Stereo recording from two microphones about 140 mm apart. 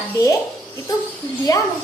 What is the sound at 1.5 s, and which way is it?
Speech, 25° left (ahead or behind).